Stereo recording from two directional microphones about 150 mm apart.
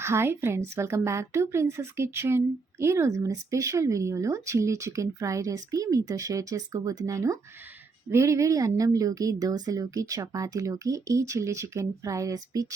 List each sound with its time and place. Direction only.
0.0 s a woman's voice: 15° right (ahead or behind)